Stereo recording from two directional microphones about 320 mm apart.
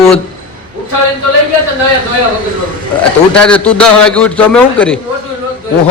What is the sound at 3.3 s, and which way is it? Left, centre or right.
A man's voice, centre.